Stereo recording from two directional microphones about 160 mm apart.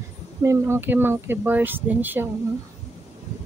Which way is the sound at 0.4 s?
15° right (ahead or behind).